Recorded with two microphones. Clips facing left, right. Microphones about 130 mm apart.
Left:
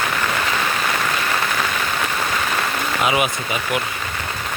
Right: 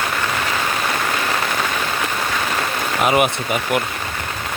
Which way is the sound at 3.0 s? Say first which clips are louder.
Right 4 dB; 55° right (ahead or behind).